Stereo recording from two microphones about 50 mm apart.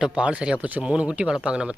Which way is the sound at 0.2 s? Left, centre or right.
Right.